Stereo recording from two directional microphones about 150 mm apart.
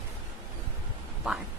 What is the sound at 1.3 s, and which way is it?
Speech, 5° right (ahead or behind).